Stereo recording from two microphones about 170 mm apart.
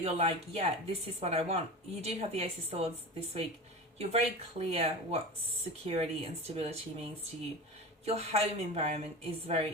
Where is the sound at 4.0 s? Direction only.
40° right (ahead or behind).